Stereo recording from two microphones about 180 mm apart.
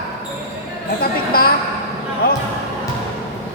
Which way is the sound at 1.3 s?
55° left (ahead or behind).